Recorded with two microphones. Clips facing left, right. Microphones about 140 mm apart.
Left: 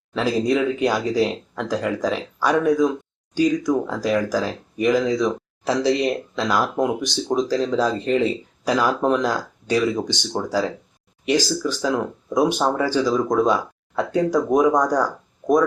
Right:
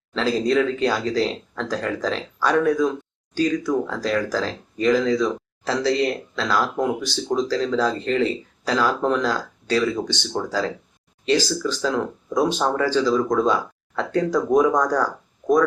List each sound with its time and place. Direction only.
0.1 s speech: 15° left (ahead or behind)